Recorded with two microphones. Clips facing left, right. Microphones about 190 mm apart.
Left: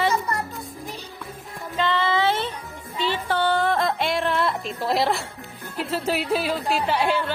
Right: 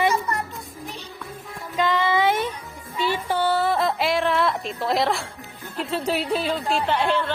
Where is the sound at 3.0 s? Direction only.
10° right (ahead or behind).